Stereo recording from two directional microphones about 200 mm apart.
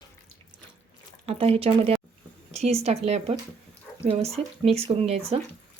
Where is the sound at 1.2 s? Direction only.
30° right (ahead or behind).